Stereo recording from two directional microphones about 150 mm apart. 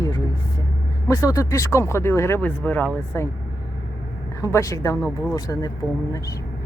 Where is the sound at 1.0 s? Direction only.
20° left (ahead or behind).